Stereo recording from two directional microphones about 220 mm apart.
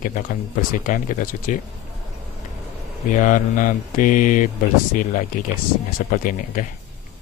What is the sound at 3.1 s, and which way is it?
Speech, 35° left (ahead or behind).